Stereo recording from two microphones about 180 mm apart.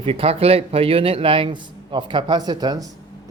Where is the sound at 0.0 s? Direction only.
30° right (ahead or behind).